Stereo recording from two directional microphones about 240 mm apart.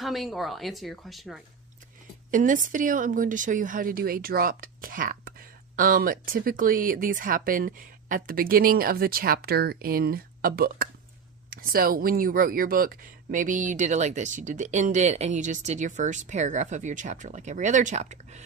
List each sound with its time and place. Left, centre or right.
0.0 s speech: centre
2.3 s speech: right